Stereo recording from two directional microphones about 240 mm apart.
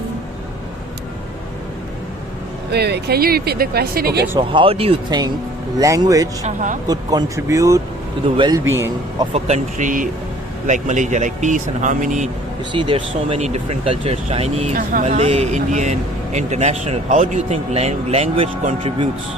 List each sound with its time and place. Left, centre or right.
2.7 s speech: right
4.3 s speech: centre
6.4 s speech: right
6.8 s speech: centre
9.3 s speech: right
12.7 s speech: right